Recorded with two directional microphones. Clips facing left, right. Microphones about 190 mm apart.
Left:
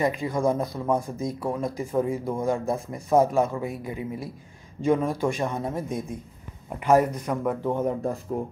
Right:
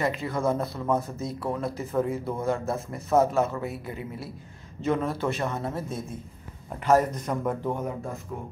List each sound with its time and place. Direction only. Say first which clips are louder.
0.0 s speech: left 3 dB; 15° left (ahead or behind)
7.7 s speech: left 6 dB; 30° left (ahead or behind)